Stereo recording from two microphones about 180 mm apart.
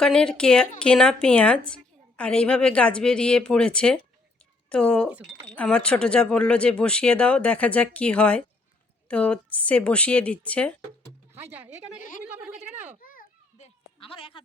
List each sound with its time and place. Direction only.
0.0 s a woman's voice: 5° left (ahead or behind)
5.0 s speech: 10° right (ahead or behind)
5.5 s speech: 5° left (ahead or behind)
11.3 s speech: 10° right (ahead or behind)
13.0 s children playing: 50° left (ahead or behind)
14.0 s speech: 30° left (ahead or behind)